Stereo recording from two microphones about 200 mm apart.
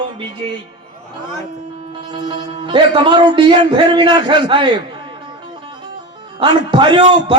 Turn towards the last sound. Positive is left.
turn(degrees=-25)  # may be behind; listen again after turning